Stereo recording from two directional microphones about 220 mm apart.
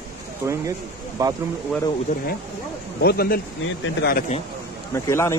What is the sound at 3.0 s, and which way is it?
Speech, 45° left (ahead or behind).